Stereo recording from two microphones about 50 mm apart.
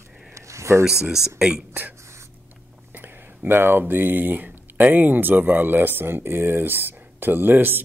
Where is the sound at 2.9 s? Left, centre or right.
Right.